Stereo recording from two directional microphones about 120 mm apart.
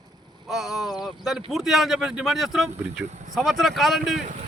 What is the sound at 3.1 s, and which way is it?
Speech, 75° right (ahead or behind).